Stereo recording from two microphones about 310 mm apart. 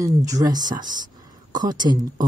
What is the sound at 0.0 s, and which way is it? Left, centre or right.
Speech, centre.